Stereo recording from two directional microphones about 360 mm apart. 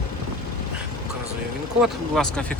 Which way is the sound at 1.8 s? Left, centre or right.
Centre.